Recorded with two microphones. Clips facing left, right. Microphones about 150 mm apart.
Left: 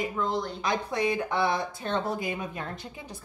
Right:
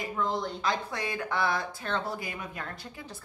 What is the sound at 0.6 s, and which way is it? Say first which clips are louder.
A woman's voice: left 4 dB; 20° left (ahead or behind).